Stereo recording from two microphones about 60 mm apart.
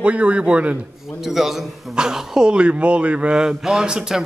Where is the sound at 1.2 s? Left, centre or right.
Centre.